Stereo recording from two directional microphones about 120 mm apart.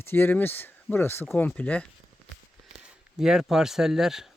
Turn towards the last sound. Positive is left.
turn(degrees=-5)  # may be behind; listen again after turning